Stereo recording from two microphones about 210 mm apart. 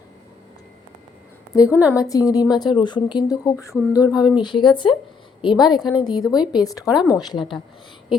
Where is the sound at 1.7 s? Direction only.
10° right (ahead or behind).